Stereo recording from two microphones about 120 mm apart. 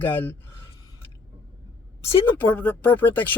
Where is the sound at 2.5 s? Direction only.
10° left (ahead or behind).